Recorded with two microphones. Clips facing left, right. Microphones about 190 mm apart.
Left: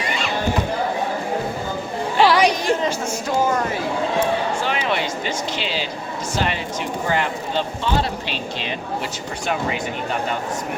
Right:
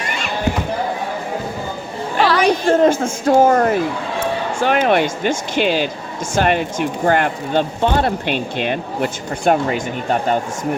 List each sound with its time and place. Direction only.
2.2 s chatter: 15° left (ahead or behind)
2.8 s speech: 55° right (ahead or behind)